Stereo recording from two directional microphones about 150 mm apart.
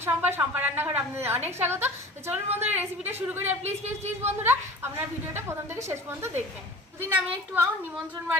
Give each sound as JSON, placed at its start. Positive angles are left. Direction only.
{"t": 0.0, "sound": "a woman's voice", "side_deg": -15}
{"t": 2.5, "sound": "speech", "side_deg": -45}
{"t": 3.1, "sound": "a woman's voice", "side_deg": -15}
{"t": 3.6, "sound": "speech", "side_deg": -50}
{"t": 4.4, "sound": "a woman's voice", "side_deg": -15}